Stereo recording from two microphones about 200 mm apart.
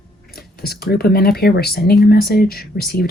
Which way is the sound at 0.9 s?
50° left (ahead or behind).